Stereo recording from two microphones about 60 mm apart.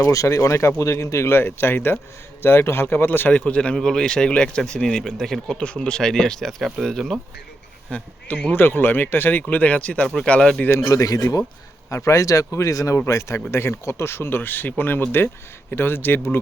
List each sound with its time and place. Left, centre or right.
0.1 s speech: left; by 5.5 s centre
5.5 s speech: centre
7.9 s speech: centre
8.5 s speech: left; by 10.6 s centre
10.7 s speech: left
13.1 s speech: left